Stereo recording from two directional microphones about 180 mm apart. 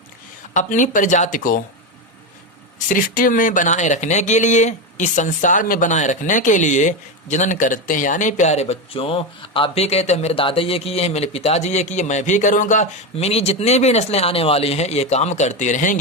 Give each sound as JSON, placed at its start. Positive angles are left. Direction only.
{"t": 0.5, "sound": "speech", "side_deg": 45}
{"t": 2.7, "sound": "speech", "side_deg": 50}